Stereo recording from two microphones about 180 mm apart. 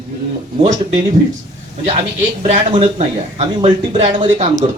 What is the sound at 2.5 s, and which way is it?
Speech, 30° right (ahead or behind).